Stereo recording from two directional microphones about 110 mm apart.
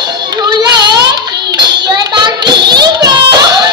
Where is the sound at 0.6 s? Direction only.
40° right (ahead or behind).